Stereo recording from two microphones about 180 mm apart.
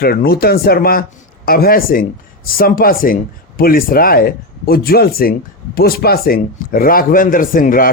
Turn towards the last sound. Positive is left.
turn(degrees=50)  # may be behind; listen again after turning